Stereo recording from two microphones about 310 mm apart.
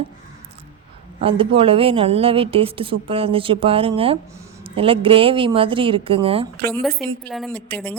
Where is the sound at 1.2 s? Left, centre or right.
Centre.